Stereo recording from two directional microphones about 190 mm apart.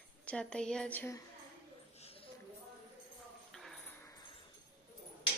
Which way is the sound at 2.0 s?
30° left (ahead or behind).